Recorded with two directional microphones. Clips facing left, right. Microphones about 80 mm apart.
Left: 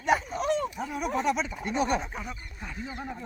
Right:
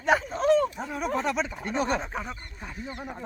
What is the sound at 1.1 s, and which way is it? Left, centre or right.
Speech, right.